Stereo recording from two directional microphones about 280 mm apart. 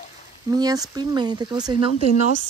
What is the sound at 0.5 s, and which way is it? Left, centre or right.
Speech, centre.